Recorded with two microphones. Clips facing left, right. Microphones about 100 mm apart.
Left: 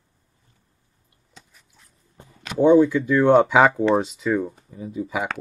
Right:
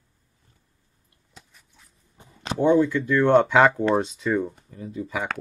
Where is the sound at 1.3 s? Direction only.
Centre (ahead or behind).